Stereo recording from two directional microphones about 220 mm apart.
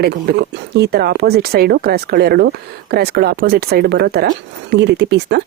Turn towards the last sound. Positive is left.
turn(degrees=-50)  # may be behind; listen again after turning